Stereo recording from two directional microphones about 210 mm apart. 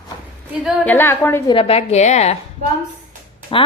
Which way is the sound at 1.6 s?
25° left (ahead or behind).